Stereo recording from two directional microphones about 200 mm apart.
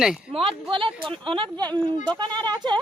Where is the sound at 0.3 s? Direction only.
25° right (ahead or behind).